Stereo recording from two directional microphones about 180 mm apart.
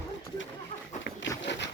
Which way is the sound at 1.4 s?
75° left (ahead or behind).